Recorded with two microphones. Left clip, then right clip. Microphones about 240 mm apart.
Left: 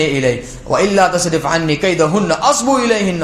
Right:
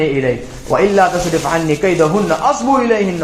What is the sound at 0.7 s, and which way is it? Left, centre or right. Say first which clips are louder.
A man's voice: right 1 dB; left.